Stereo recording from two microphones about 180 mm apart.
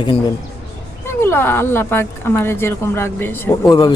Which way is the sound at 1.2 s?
15° left (ahead or behind).